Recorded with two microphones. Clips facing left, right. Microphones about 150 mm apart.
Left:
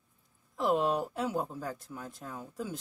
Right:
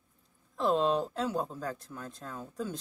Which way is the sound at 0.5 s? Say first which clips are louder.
Right 1 dB; 10° left (ahead or behind).